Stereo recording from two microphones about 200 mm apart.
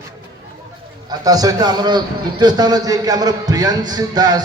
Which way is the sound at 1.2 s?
20° right (ahead or behind).